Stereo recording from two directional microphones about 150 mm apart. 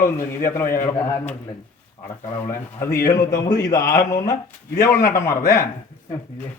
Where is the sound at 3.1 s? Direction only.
25° left (ahead or behind).